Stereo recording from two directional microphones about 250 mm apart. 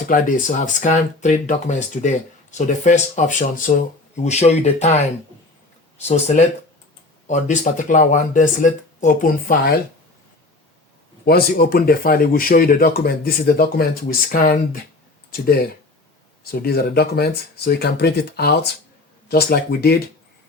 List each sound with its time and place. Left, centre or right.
0.1 s speech: left
6.0 s speech: left
11.3 s speech: left